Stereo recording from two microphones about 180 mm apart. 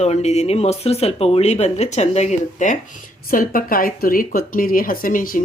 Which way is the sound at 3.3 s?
50° left (ahead or behind).